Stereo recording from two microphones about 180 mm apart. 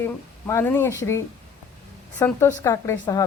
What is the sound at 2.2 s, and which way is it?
Speech, 15° left (ahead or behind).